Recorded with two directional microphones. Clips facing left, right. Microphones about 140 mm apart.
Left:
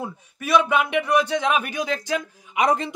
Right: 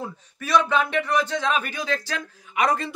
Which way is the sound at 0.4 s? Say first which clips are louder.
Left 1 dB; 10° left (ahead or behind).